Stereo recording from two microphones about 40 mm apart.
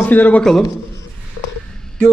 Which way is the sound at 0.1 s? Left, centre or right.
Left.